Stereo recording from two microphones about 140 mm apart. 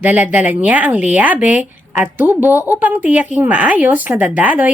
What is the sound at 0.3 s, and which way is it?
A woman's voice, 10° right (ahead or behind).